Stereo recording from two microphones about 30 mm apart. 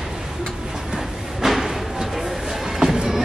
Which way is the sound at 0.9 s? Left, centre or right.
Centre.